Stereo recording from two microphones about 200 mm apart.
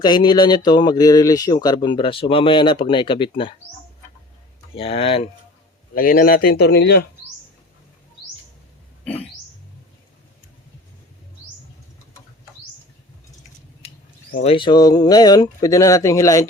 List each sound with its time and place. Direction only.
0.0 s speech: 20° left (ahead or behind)
4.7 s speech: 30° left (ahead or behind)
5.9 s a man's voice: 45° left (ahead or behind)
13.8 s a sound: 30° left (ahead or behind)
14.4 s speech: 25° left (ahead or behind)